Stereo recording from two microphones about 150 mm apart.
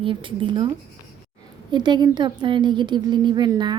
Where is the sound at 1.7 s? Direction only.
30° right (ahead or behind).